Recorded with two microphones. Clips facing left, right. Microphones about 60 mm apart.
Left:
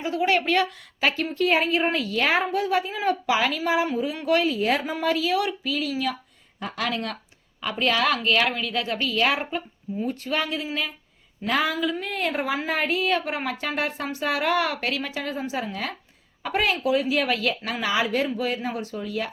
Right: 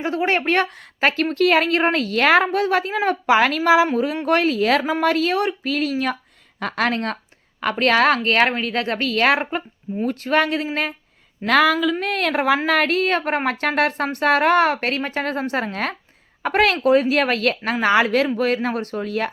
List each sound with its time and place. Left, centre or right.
0.0 s a woman's voice: right
5.4 s a woman's voice: right
6.6 s speech: right
6.8 s a woman's voice: right
7.6 s a woman's voice: right
11.4 s a woman's voice: right
12.6 s a woman's voice: right
16.8 s a woman's voice: right